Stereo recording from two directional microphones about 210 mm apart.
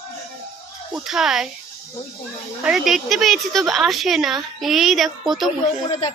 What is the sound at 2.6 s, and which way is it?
A woman's voice, centre (ahead or behind).